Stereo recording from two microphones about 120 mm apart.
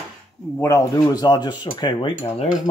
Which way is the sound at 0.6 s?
25° left (ahead or behind).